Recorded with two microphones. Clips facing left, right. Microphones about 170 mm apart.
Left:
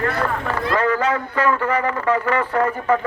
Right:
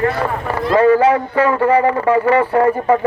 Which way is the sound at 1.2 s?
30° right (ahead or behind).